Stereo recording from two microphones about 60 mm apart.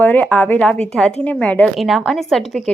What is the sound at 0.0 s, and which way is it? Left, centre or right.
Speech, left.